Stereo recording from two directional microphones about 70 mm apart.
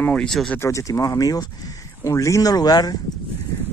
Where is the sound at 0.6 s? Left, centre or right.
Left.